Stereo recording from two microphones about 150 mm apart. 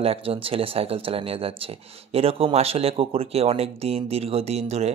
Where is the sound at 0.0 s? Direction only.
40° right (ahead or behind).